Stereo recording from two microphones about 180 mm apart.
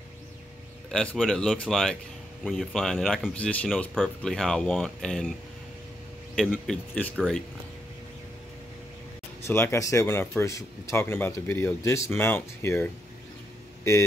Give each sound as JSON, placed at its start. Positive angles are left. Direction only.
{"t": 0.9, "sound": "speech", "side_deg": 5}
{"t": 6.3, "sound": "speech", "side_deg": 0}
{"t": 9.5, "sound": "speech", "side_deg": 15}